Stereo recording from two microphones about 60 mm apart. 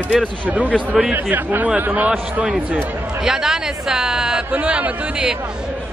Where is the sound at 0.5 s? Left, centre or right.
Right.